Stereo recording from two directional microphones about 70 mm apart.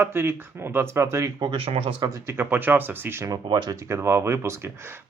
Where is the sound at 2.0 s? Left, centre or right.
Right.